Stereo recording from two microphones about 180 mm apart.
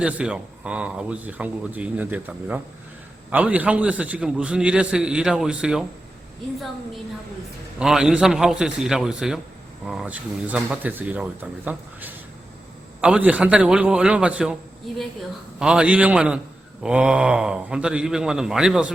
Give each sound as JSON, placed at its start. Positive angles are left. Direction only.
{"t": 0.0, "sound": "a man's voice", "side_deg": -5}
{"t": 7.8, "sound": "a man's voice", "side_deg": -5}
{"t": 15.5, "sound": "a man's voice", "side_deg": -5}